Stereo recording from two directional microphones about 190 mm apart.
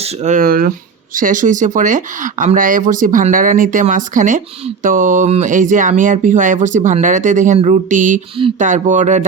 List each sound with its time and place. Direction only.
0.3 s speech: 45° right (ahead or behind)